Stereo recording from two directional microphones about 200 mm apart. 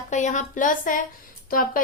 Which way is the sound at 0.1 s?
40° left (ahead or behind).